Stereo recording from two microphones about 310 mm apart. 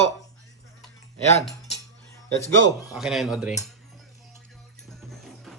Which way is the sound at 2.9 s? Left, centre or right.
Centre.